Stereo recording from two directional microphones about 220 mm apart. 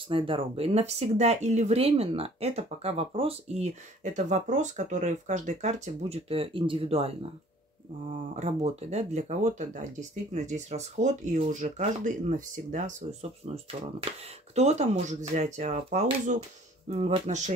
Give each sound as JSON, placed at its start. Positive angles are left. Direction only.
{"t": 0.1, "sound": "speech", "side_deg": -25}
{"t": 8.4, "sound": "speech", "side_deg": -30}